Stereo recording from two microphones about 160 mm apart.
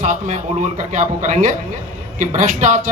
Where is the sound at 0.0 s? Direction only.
50° right (ahead or behind).